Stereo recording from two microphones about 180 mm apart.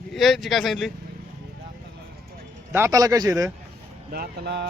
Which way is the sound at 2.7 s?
15° right (ahead or behind).